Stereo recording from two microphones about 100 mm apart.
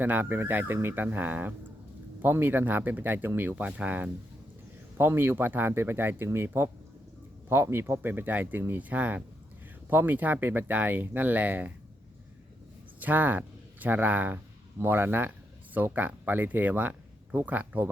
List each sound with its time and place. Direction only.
0.0 s speech: 20° right (ahead or behind)
13.0 s speech: 15° right (ahead or behind)